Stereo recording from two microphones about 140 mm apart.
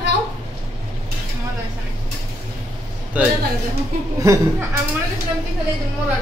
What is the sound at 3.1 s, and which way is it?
Speech, 10° right (ahead or behind).